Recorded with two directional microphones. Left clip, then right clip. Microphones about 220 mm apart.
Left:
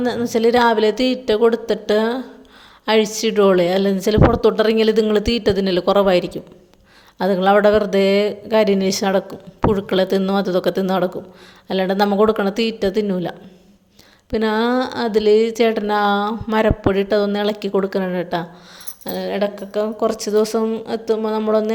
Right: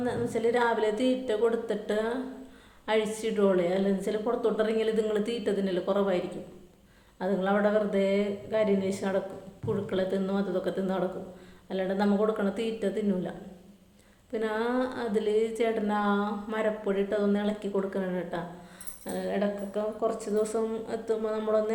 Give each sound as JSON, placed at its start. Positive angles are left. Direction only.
{"t": 0.0, "sound": "speech", "side_deg": 45}
{"t": 3.2, "sound": "speech", "side_deg": 45}
{"t": 14.3, "sound": "speech", "side_deg": 45}